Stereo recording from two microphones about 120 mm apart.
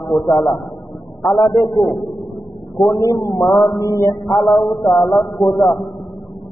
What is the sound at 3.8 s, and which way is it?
Speech, 30° left (ahead or behind).